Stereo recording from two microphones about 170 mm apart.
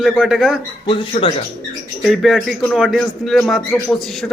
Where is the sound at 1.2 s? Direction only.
35° left (ahead or behind).